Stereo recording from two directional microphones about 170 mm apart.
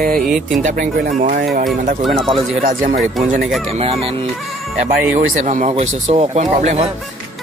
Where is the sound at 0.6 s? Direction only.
50° right (ahead or behind).